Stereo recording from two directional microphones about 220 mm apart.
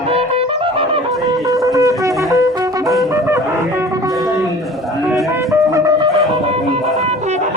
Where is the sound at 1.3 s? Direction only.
15° right (ahead or behind).